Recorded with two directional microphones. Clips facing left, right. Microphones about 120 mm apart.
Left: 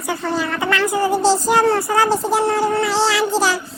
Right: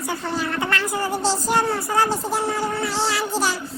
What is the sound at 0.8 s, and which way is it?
A woman's voice, 90° left.